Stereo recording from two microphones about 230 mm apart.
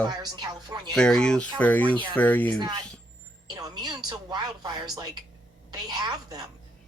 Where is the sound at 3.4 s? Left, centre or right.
Centre.